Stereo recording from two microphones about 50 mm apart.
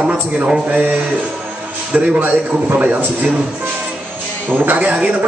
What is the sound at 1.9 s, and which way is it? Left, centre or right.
Speech, centre.